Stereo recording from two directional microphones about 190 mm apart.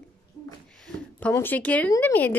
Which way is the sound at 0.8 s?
10° left (ahead or behind).